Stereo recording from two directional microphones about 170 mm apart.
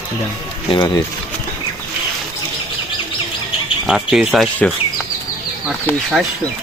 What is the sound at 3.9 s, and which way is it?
Speech, 5° right (ahead or behind).